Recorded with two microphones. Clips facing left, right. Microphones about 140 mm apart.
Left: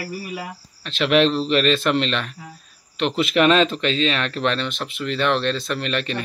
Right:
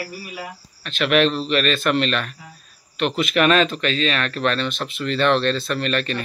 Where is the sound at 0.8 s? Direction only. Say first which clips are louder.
Left 1 dB; 25° left (ahead or behind).